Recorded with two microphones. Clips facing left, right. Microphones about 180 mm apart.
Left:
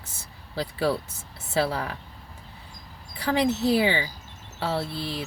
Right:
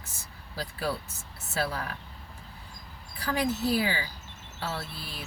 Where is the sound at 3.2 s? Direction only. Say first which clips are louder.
Left 5 dB; 85° left.